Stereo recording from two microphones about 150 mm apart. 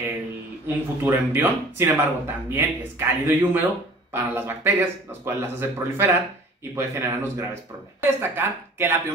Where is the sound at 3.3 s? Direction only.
15° right (ahead or behind).